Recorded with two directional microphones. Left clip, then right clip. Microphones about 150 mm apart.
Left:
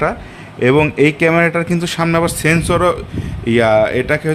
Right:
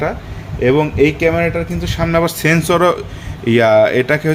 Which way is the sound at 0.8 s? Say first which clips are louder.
Left 1 dB; 35° left (ahead or behind).